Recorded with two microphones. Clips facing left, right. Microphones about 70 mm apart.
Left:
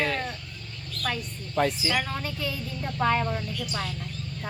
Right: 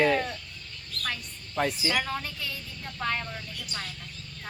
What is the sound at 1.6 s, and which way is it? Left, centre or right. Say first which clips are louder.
Speech: left 2 dB; centre.